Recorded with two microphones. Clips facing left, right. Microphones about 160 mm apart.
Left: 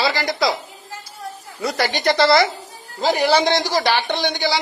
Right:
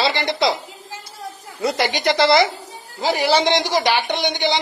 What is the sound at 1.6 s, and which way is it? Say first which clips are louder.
Speech: right 1 dB; 20° right (ahead or behind).